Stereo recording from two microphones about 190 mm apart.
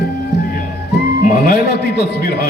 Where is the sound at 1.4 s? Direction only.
60° left (ahead or behind).